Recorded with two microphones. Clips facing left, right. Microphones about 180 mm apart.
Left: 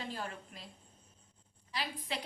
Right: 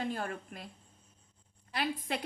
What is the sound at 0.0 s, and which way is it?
Speech, 50° right (ahead or behind).